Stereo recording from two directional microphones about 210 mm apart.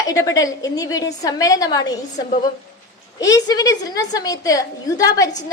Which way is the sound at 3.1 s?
20° left (ahead or behind).